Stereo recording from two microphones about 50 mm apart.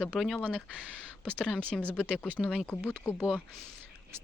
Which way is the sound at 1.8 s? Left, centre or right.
Left.